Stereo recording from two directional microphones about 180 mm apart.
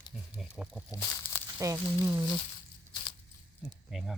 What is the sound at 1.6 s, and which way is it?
Speech, 15° right (ahead or behind).